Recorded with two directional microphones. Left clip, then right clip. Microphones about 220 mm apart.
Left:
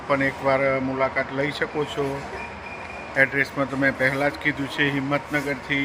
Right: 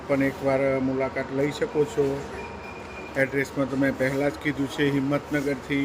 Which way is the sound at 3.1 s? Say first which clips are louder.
Left 5 dB; 5° right (ahead or behind).